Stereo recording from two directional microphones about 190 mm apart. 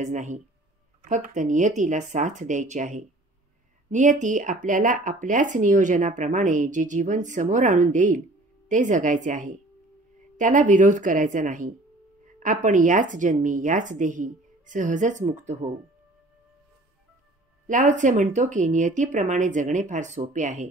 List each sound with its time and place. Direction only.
0.0 s a woman's voice: 40° right (ahead or behind)
17.6 s speech: 40° right (ahead or behind)